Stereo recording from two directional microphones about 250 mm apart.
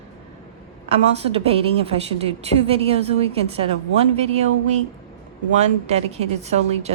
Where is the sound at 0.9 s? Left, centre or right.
Right.